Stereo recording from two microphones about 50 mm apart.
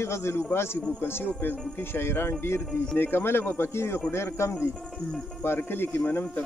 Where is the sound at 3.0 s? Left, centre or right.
Left.